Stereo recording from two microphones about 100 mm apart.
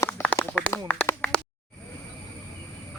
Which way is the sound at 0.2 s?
30° left (ahead or behind).